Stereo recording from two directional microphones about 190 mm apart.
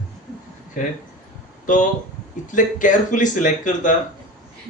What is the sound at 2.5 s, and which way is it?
Speech, 45° left (ahead or behind).